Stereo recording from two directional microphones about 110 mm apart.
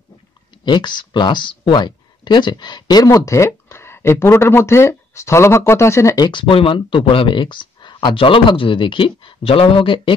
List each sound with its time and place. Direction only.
0.7 s speech: 45° left (ahead or behind); by 6.1 s 25° left (ahead or behind)
6.1 s speech: 45° left (ahead or behind)